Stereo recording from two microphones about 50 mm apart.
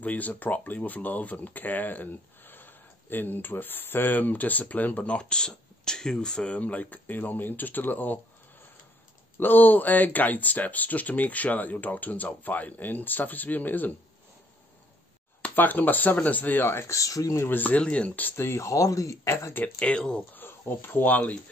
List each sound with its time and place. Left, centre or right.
0.0 s speech: left
9.4 s speech: left
15.5 s speech: left
16.8 s speech: left
17.5 s speech: left
17.8 s speech: left
18.3 s speech: left
19.8 s speech: left
20.3 s speech: left